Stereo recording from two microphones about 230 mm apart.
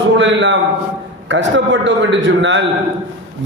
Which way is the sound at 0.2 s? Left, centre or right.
Right.